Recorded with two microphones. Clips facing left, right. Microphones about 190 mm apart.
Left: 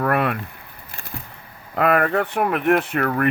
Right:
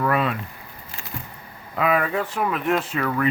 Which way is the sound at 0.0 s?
60° left (ahead or behind).